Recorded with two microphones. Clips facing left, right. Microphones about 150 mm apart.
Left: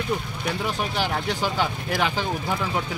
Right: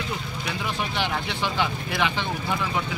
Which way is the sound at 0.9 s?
40° left (ahead or behind).